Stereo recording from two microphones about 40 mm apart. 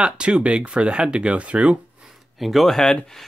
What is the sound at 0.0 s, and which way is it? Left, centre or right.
Speech, right.